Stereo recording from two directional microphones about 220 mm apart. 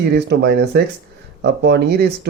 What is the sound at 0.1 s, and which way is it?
Speech, 50° right (ahead or behind).